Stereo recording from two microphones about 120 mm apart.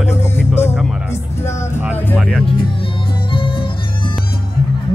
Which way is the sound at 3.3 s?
45° left (ahead or behind).